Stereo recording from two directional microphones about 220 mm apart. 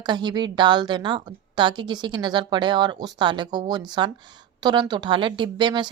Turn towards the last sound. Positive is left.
turn(degrees=-20)  # may be behind; listen again after turning